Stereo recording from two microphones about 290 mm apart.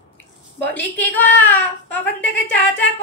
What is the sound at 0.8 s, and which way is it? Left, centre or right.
A woman's voice, centre.